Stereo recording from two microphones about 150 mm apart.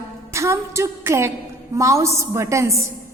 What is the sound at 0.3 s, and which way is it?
A woman's voice, 20° right (ahead or behind).